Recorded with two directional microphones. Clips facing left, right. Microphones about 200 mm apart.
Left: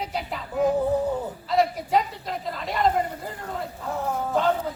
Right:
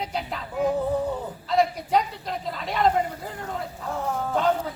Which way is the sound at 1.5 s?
Centre (ahead or behind).